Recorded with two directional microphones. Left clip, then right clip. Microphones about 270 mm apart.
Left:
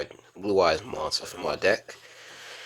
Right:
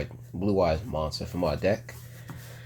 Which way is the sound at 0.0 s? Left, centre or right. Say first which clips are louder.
Right 1 dB; left.